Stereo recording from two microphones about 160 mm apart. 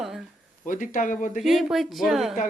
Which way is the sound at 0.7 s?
55° left (ahead or behind).